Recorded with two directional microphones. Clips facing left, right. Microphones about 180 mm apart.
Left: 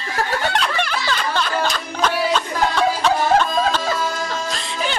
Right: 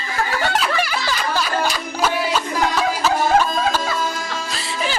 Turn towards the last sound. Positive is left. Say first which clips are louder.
# even
turn(degrees=0)  # may be behind; listen again after turning